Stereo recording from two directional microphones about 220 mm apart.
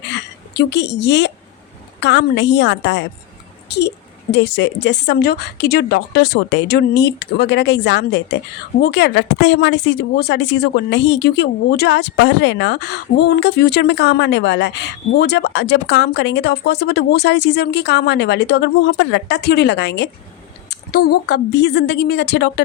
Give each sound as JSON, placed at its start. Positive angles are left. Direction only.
{"t": 0.1, "sound": "hiccup", "side_deg": 50}
{"t": 2.0, "sound": "speech", "side_deg": 50}